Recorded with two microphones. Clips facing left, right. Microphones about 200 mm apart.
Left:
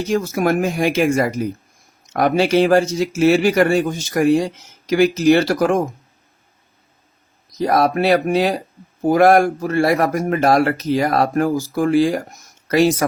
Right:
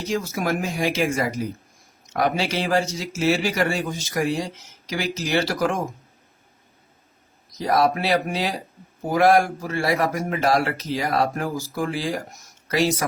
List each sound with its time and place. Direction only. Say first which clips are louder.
0.1 s a man's voice: left 6 dB; 50° left (ahead or behind)
7.7 s a man's voice: left 4 dB; 55° left (ahead or behind)